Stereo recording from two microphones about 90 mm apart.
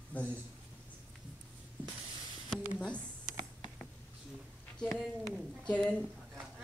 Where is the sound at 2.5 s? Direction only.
10° left (ahead or behind).